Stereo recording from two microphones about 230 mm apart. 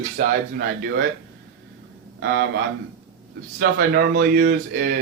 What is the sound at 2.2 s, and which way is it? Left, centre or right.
Speech, right.